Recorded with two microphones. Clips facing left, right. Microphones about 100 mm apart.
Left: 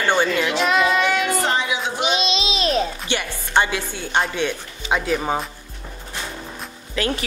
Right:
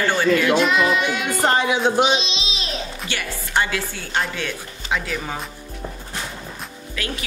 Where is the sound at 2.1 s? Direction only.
50° left (ahead or behind).